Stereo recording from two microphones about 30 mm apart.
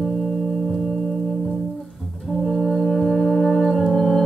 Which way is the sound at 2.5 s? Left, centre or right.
Centre.